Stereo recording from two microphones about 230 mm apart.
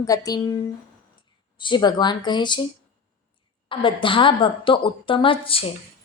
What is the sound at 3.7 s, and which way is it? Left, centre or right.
Female singing, left.